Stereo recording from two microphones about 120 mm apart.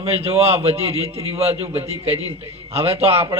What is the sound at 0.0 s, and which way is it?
A man's voice, 60° right (ahead or behind).